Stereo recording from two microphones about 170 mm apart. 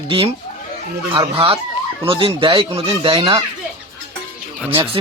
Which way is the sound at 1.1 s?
30° right (ahead or behind).